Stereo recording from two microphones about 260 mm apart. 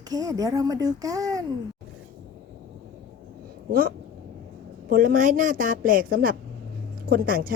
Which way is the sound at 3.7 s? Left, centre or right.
Right.